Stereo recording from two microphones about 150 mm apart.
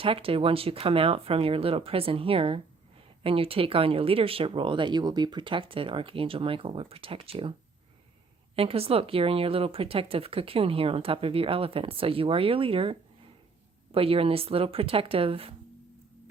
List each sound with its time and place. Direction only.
0.0 s speech: 40° right (ahead or behind)
8.5 s speech: 40° right (ahead or behind)